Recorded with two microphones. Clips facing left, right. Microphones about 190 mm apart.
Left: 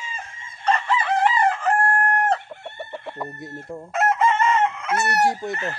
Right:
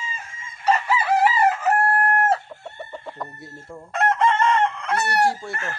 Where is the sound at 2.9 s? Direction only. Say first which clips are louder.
Left 4 dB; 5° left (ahead or behind).